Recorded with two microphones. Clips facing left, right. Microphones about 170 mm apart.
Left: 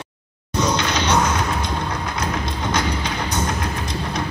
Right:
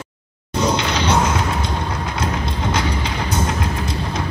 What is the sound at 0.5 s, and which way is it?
Music, 30° right (ahead or behind).